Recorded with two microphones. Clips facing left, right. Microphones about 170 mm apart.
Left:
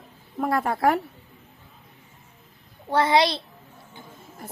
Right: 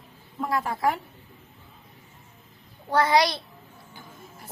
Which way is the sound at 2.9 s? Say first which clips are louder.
Left 1 dB; 25° left (ahead or behind).